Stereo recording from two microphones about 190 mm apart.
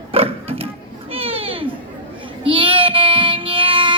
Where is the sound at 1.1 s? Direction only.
30° right (ahead or behind).